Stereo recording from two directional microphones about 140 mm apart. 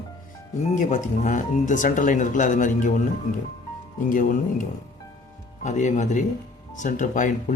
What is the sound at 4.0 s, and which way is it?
Speech, 75° left (ahead or behind).